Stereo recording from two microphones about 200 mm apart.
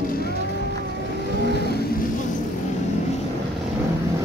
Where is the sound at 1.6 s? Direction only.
55° left (ahead or behind).